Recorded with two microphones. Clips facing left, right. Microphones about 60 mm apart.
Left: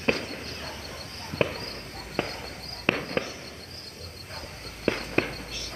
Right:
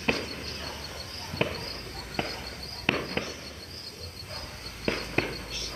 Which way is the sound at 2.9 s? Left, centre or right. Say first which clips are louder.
Left 2 dB; left.